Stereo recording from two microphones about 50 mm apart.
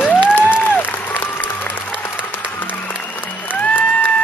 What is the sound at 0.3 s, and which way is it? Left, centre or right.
Applause, left.